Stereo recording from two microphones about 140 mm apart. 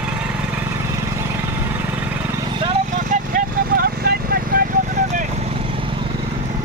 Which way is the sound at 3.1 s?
80° right.